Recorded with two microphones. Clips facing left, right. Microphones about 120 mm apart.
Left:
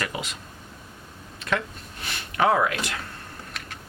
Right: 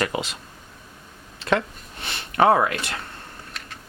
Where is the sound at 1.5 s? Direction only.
30° right (ahead or behind).